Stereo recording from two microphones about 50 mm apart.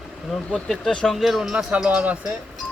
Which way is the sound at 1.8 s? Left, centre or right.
Right.